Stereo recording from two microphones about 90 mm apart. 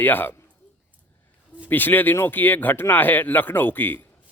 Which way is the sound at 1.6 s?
20° left (ahead or behind).